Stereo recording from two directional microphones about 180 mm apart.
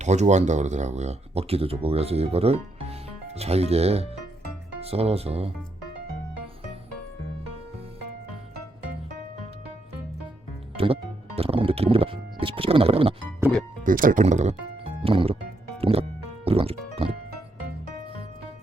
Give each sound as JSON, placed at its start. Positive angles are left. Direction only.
{"t": 0.0, "sound": "speech", "side_deg": -40}
{"t": 11.3, "sound": "music", "side_deg": -35}
{"t": 13.8, "sound": "speech", "side_deg": -50}
{"t": 15.8, "sound": "music", "side_deg": -35}